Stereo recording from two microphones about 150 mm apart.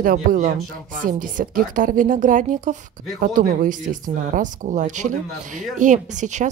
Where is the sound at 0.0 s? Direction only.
65° right (ahead or behind).